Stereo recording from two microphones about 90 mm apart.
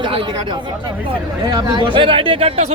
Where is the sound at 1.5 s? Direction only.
60° right (ahead or behind); by 2.5 s 80° right.